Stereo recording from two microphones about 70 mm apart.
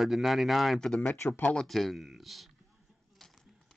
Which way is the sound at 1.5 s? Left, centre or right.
Centre.